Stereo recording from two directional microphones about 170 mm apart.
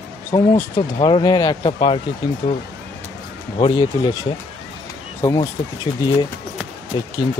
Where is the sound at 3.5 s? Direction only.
30° left (ahead or behind).